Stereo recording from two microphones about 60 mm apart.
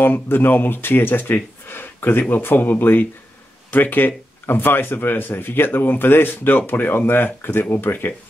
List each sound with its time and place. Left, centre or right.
0.0 s a man's voice: left